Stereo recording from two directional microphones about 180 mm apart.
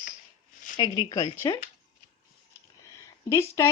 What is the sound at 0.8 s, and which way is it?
Speech, 20° left (ahead or behind).